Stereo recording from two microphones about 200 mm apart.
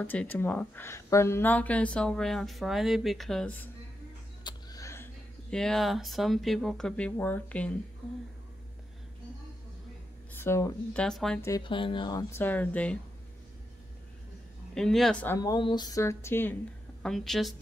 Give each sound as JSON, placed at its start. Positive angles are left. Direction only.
{"t": 0.0, "sound": "speech", "side_deg": 10}
{"t": 4.5, "sound": "speech", "side_deg": 20}
{"t": 10.3, "sound": "speech", "side_deg": 10}
{"t": 11.4, "sound": "speech", "side_deg": 20}
{"t": 14.7, "sound": "a woman's voice", "side_deg": 0}